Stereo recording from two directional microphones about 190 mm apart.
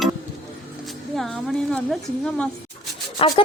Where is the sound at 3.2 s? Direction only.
30° left (ahead or behind).